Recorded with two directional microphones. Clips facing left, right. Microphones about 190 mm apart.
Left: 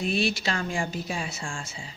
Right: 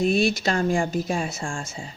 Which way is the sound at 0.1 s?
45° right (ahead or behind).